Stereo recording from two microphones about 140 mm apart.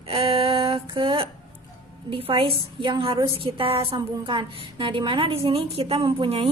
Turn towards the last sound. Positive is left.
turn(degrees=-40)  # may be behind; listen again after turning